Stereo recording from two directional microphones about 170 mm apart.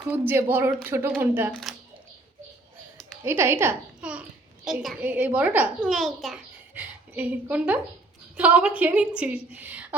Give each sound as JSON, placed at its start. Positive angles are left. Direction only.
{"t": 0.1, "sound": "a woman's voice", "side_deg": -15}
{"t": 3.2, "sound": "a child's voice", "side_deg": -15}
{"t": 5.8, "sound": "a child's voice", "side_deg": 0}
{"t": 7.1, "sound": "a woman's voice", "side_deg": -10}